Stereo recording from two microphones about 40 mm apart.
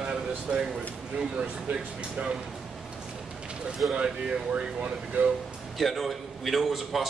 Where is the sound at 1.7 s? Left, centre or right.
Right.